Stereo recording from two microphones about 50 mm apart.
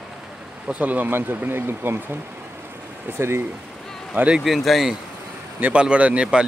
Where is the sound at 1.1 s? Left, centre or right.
Right.